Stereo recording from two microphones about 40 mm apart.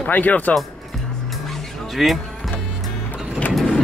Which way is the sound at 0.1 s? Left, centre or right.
Left.